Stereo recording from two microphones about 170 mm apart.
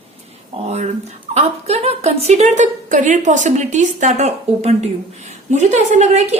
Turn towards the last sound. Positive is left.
turn(degrees=-40)  # may be behind; listen again after turning